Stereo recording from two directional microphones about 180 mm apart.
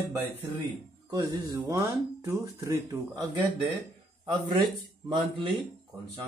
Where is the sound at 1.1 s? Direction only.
20° right (ahead or behind).